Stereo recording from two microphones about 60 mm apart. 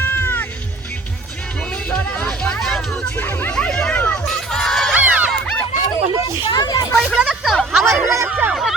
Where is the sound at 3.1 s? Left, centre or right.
Left.